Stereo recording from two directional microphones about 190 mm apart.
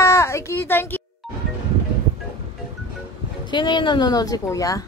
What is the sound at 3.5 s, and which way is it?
A woman's voice, 25° left (ahead or behind).